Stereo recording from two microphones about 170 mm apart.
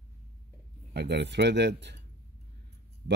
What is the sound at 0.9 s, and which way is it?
Speech, 85° right.